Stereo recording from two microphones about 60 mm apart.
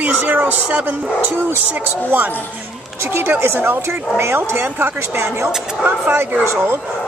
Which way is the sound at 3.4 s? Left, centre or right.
Right.